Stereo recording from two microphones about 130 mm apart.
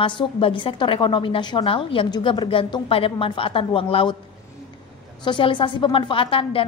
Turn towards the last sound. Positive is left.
turn(degrees=45)  # may be behind; listen again after turning